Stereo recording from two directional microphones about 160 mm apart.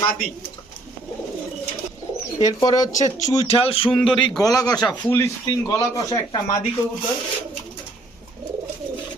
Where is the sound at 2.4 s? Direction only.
25° left (ahead or behind).